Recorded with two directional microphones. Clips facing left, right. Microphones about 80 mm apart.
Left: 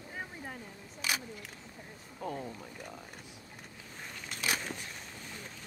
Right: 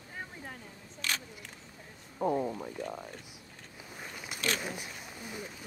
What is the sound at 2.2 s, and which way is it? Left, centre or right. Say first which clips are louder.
Speech: right 9 dB; right.